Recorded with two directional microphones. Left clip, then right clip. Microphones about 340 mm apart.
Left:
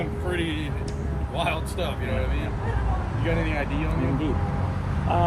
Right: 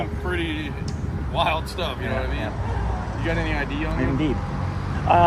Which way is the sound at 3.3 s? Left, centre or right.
Centre.